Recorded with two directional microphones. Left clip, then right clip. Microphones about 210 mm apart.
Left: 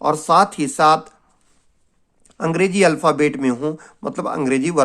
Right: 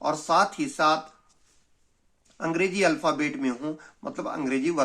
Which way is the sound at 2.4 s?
50° left (ahead or behind).